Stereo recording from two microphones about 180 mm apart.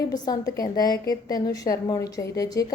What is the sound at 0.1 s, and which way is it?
A woman's voice, 20° left (ahead or behind).